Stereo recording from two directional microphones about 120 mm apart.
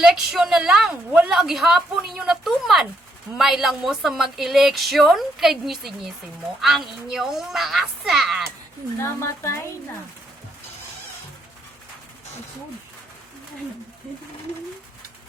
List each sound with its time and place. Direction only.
0.0 s a woman's voice: 5° right (ahead or behind)
9.0 s a woman's voice: 20° left (ahead or behind)